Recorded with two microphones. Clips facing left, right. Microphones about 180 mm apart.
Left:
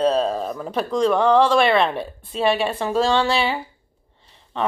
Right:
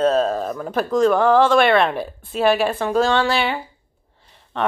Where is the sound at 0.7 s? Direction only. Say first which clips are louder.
Right 2 dB; centre (ahead or behind).